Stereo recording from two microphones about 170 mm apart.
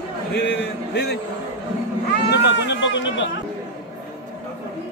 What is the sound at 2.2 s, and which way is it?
Speech, 90° left.